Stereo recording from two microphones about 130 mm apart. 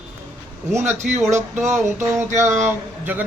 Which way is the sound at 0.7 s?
15° right (ahead or behind).